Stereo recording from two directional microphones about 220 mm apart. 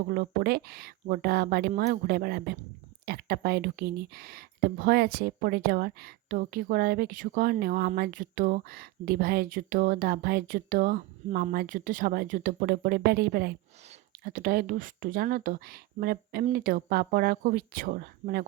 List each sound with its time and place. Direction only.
0.1 s speech: 45° right (ahead or behind)